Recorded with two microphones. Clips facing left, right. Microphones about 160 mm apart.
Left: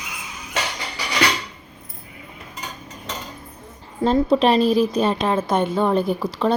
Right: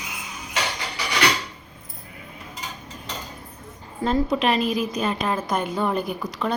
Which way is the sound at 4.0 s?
30° left (ahead or behind).